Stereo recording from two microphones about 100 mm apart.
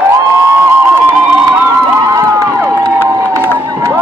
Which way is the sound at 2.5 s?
25° right (ahead or behind).